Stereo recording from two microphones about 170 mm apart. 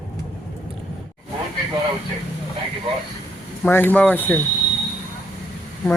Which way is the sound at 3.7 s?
10° left (ahead or behind).